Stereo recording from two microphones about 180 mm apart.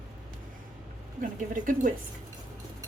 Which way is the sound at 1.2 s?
45° right (ahead or behind).